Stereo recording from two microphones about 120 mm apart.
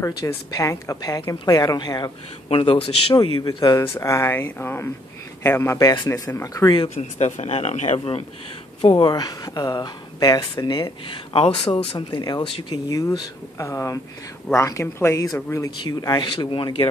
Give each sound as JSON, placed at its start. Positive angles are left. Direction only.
{"t": 0.0, "sound": "speech", "side_deg": 25}
{"t": 2.5, "sound": "a man's voice", "side_deg": 50}
{"t": 3.5, "sound": "speech", "side_deg": 30}
{"t": 5.8, "sound": "speech", "side_deg": 35}
{"t": 7.0, "sound": "speech", "side_deg": 70}
{"t": 8.8, "sound": "a man's voice", "side_deg": 40}
{"t": 12.1, "sound": "speech", "side_deg": 35}
{"t": 12.4, "sound": "a man's voice", "side_deg": 50}
{"t": 12.7, "sound": "speech", "side_deg": 30}